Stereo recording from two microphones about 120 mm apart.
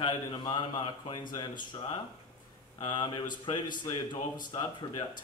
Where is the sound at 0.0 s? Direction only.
40° left (ahead or behind).